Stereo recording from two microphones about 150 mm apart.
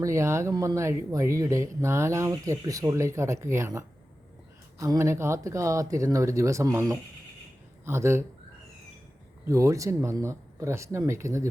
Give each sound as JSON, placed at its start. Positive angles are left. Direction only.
{"t": 0.0, "sound": "speech", "side_deg": -20}
{"t": 9.5, "sound": "speech", "side_deg": -20}